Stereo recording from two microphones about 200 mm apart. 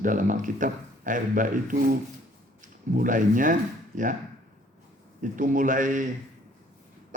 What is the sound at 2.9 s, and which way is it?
Speech, 40° right (ahead or behind).